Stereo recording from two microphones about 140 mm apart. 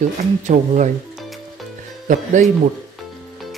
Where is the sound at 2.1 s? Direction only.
60° right (ahead or behind).